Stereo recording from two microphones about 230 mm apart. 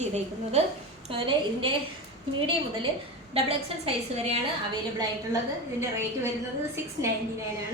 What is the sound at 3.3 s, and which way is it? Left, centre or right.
Speech, right.